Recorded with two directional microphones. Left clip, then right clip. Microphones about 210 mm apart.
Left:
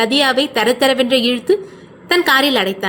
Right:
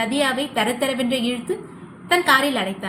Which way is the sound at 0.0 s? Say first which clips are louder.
Left 7 dB; 40° left (ahead or behind).